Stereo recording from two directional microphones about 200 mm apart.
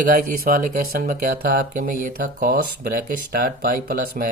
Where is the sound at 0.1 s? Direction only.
45° right (ahead or behind).